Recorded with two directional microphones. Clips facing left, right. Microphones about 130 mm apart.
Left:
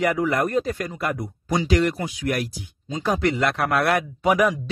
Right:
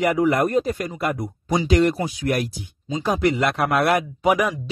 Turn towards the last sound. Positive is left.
turn(degrees=-15)  # may be behind; listen again after turning